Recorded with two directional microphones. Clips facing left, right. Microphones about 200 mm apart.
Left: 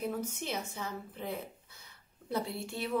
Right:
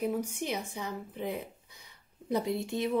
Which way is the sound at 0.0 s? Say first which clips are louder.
Right 4 dB; 15° right (ahead or behind).